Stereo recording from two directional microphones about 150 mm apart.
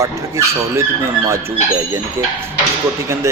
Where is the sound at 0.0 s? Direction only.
20° right (ahead or behind).